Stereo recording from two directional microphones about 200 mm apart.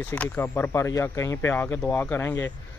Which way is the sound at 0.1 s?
10° left (ahead or behind).